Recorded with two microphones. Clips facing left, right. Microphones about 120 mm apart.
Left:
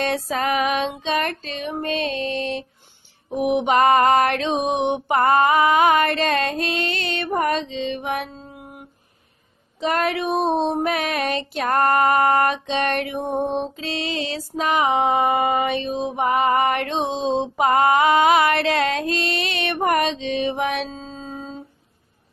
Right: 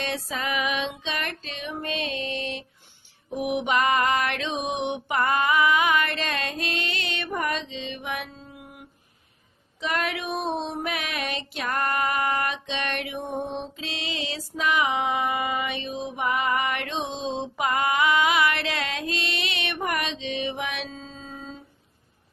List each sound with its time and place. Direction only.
0.0 s mantra: 45° left (ahead or behind)